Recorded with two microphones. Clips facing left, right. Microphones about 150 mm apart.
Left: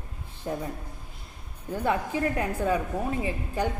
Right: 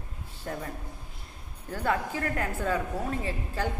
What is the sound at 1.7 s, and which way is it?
A woman's voice, 20° left (ahead or behind).